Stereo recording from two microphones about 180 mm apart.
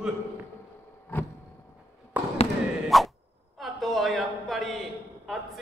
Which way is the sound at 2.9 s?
Centre (ahead or behind).